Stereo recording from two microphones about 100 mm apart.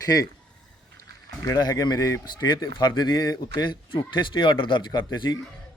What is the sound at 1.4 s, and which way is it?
Speech, 40° left (ahead or behind).